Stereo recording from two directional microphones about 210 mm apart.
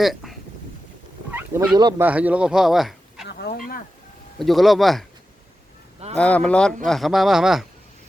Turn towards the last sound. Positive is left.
turn(degrees=0)  # may be behind; listen again after turning